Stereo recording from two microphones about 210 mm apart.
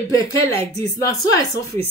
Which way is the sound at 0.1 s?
15° left (ahead or behind).